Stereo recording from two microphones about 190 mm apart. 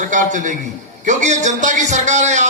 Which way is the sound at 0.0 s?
40° right (ahead or behind).